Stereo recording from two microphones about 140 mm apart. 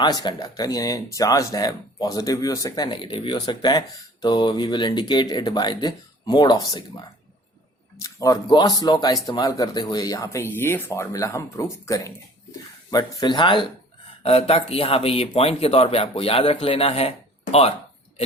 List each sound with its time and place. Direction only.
0.0 s speech: 30° left (ahead or behind)
7.9 s speech: 25° left (ahead or behind)
12.9 s speech: 30° left (ahead or behind)